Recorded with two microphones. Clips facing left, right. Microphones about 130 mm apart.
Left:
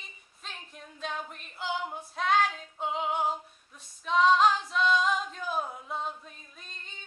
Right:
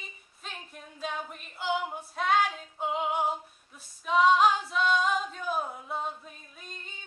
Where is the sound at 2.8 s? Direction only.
5° right (ahead or behind).